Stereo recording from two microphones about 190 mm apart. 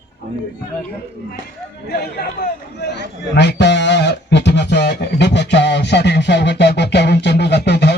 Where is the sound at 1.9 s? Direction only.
60° left (ahead or behind).